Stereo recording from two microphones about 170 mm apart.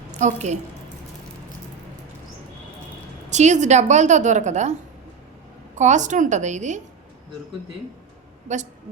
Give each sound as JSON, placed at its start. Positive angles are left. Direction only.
{"t": 0.1, "sound": "a woman's voice", "side_deg": -45}
{"t": 3.2, "sound": "a woman's voice", "side_deg": -45}
{"t": 5.7, "sound": "a woman's voice", "side_deg": -45}
{"t": 8.5, "sound": "a woman's voice", "side_deg": -45}